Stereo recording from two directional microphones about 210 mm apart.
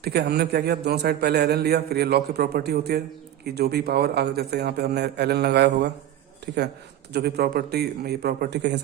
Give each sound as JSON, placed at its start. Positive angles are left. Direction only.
{"t": 0.0, "sound": "a man's voice", "side_deg": -50}